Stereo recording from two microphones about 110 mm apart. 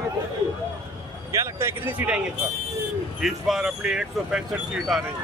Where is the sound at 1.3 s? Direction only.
25° right (ahead or behind).